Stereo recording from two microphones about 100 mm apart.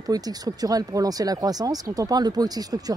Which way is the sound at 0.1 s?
40° right (ahead or behind).